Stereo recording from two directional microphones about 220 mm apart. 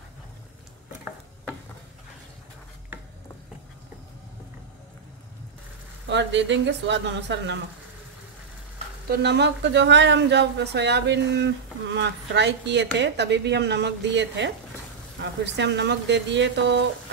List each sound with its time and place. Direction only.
6.0 s speech: 55° right (ahead or behind)
9.1 s speech: 50° right (ahead or behind)